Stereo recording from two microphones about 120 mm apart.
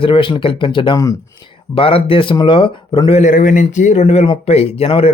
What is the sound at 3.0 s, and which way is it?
A man's voice, 75° left (ahead or behind).